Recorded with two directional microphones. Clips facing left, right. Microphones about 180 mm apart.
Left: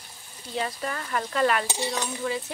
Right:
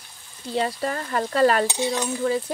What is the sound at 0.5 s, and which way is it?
Frying, 35° right (ahead or behind).